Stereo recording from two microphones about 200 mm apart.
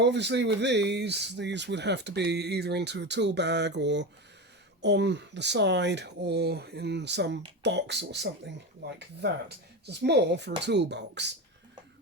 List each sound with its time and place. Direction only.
0.0 s speech: 60° right (ahead or behind)
9.8 s speech: 55° right (ahead or behind)